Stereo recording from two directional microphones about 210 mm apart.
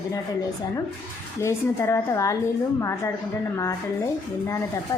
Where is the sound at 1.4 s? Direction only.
15° left (ahead or behind).